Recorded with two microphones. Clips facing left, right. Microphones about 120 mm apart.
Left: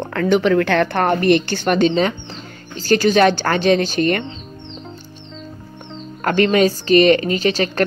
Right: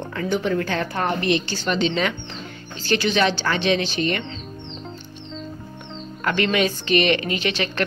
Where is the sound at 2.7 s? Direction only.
40° left (ahead or behind).